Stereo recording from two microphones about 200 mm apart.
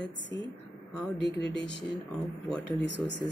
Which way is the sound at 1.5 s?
60° left (ahead or behind).